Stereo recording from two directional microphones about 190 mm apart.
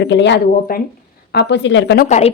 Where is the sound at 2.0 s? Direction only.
40° left (ahead or behind).